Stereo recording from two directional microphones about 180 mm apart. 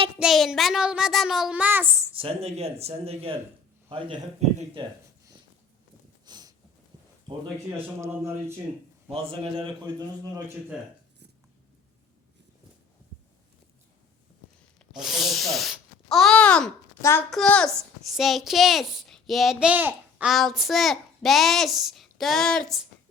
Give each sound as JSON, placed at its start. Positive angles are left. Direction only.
{"t": 0.2, "sound": "a child's voice", "side_deg": 0}
{"t": 2.1, "sound": "speech", "side_deg": -35}
{"t": 6.2, "sound": "a sound", "side_deg": -25}
{"t": 7.7, "sound": "speech", "side_deg": -15}
{"t": 9.0, "sound": "speech", "side_deg": -35}
{"t": 10.7, "sound": "a child's voice", "side_deg": -5}
{"t": 14.9, "sound": "a child's voice", "side_deg": 0}
{"t": 17.3, "sound": "a child's voice", "side_deg": 5}